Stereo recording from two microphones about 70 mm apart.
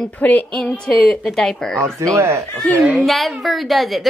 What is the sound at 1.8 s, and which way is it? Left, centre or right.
Speech, right.